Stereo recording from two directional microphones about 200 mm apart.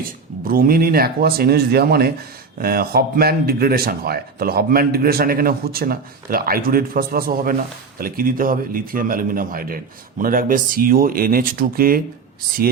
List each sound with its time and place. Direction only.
0.0 s speech: 45° right (ahead or behind)